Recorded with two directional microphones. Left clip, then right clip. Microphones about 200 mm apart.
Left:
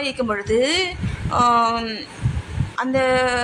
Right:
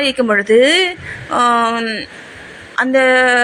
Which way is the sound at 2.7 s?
10° right (ahead or behind).